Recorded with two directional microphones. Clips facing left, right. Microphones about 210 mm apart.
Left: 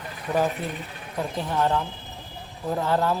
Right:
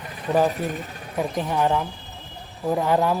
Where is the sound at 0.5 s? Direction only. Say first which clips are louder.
Right 4 dB; 45° right (ahead or behind).